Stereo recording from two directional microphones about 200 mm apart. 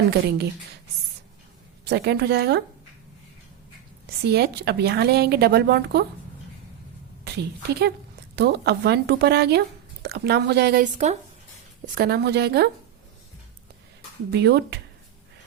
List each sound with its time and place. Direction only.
0.1 s speech: 55° right (ahead or behind)
1.8 s speech: 55° right (ahead or behind)
4.2 s speech: 55° right (ahead or behind)
7.3 s speech: 55° right (ahead or behind)
10.9 s speech: 35° right (ahead or behind)
11.9 s a woman's voice: 50° right (ahead or behind)
14.3 s speech: 55° right (ahead or behind)